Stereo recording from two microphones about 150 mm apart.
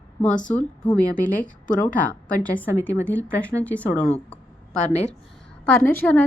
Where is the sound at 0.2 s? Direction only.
5° left (ahead or behind).